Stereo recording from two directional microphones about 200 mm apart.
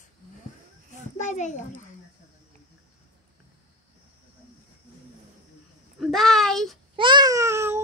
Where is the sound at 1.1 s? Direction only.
35° left (ahead or behind).